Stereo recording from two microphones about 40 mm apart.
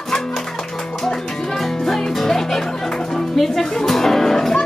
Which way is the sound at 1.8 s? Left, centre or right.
Centre.